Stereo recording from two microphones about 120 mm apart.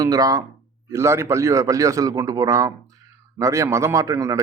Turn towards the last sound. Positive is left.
turn(degrees=-25)  # may be behind; listen again after turning